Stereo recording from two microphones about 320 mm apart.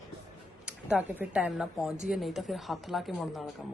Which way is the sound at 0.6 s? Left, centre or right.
Centre.